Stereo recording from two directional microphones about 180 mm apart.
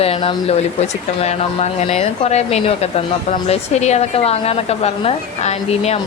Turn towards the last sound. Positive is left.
turn(degrees=35)  # may be behind; listen again after turning